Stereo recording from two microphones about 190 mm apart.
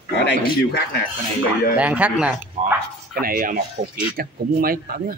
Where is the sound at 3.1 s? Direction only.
50° right (ahead or behind).